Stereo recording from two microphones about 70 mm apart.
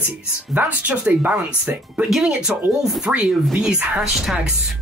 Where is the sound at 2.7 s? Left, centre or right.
Centre.